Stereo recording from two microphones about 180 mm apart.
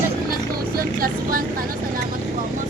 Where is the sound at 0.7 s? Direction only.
55° right (ahead or behind).